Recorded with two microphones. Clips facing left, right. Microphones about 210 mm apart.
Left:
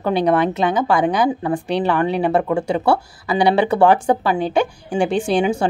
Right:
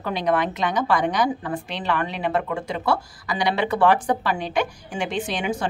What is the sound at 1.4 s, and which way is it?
A woman's voice, 30° left (ahead or behind).